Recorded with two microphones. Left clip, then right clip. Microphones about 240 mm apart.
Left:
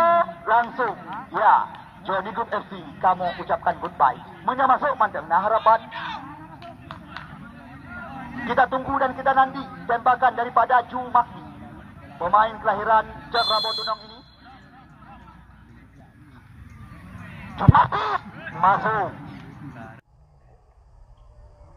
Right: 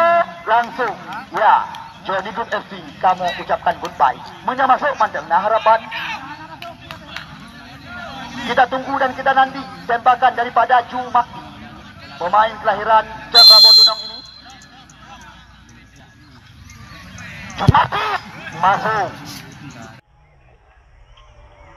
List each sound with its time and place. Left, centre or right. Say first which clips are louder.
0.0 s music: right 4 dB; right
1.3 s a man's voice: right 4 dB; right
8.5 s a man's voice: right 5 dB; right
17.6 s speech: right 3 dB; right